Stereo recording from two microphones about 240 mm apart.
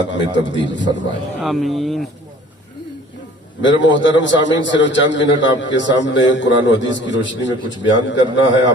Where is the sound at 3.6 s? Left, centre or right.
Left.